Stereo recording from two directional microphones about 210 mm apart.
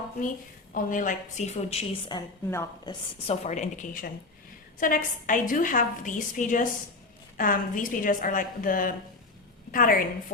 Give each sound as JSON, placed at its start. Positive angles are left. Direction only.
{"t": 0.7, "sound": "a woman's voice", "side_deg": 40}
{"t": 3.2, "sound": "a woman's voice", "side_deg": 35}